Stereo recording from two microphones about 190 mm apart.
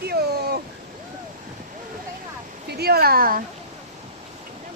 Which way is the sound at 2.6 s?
55° right (ahead or behind).